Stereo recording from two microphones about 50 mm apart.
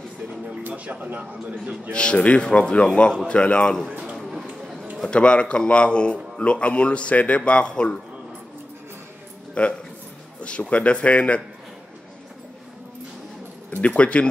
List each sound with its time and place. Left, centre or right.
0.7 s a man's voice: right
1.9 s a man's voice: centre
5.1 s a man's voice: left
9.6 s a man's voice: left
13.7 s speech: left